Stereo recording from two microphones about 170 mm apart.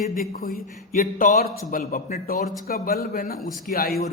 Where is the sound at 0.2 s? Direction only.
60° left (ahead or behind).